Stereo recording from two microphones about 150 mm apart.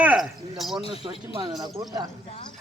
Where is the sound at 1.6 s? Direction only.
25° right (ahead or behind).